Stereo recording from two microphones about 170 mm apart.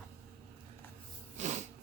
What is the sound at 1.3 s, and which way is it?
Snort, 45° right (ahead or behind).